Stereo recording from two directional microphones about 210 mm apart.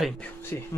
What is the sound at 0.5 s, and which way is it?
Speech, 10° left (ahead or behind).